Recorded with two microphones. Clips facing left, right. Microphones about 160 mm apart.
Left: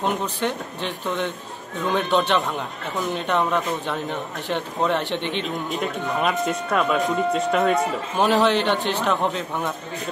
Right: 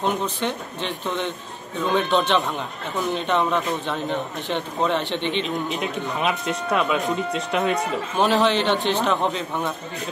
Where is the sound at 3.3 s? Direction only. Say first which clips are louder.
Left 1 dB; 10° left (ahead or behind).